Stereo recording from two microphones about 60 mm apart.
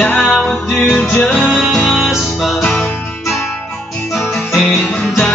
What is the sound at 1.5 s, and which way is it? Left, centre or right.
Music, centre.